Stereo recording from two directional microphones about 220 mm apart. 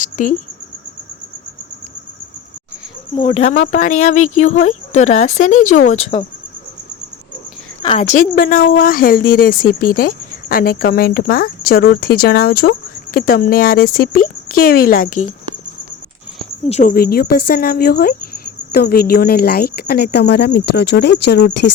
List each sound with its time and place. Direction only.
0.0 s a sound: 35° left (ahead or behind)
3.2 s speech: 25° left (ahead or behind)
7.9 s speech: 30° left (ahead or behind)
16.6 s speech: 35° left (ahead or behind); by 21.7 s 50° left (ahead or behind)